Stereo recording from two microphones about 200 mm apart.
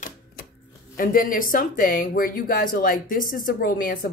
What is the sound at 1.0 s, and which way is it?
Speech, 45° left (ahead or behind).